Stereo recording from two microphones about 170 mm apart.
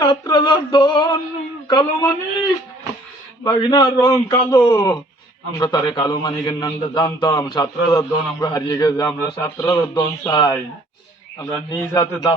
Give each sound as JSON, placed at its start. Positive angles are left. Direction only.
{"t": 0.0, "sound": "male singing", "side_deg": 25}
{"t": 1.6, "sound": "a man's voice", "side_deg": 25}